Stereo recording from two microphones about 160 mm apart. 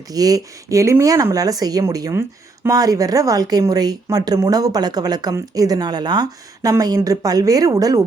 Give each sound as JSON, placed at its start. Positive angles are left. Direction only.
{"t": 0.1, "sound": "speech", "side_deg": -25}